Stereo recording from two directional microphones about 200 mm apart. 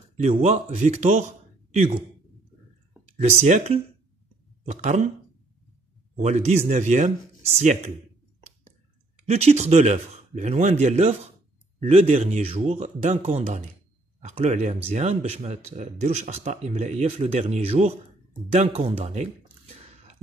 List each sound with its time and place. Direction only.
0.3 s speech: 35° right (ahead or behind)
3.2 s speech: 35° right (ahead or behind)
6.1 s speech: 35° right (ahead or behind)
18.5 s a sound: 30° right (ahead or behind)